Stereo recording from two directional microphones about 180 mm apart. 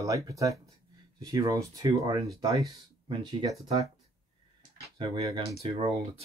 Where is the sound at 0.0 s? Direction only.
20° right (ahead or behind).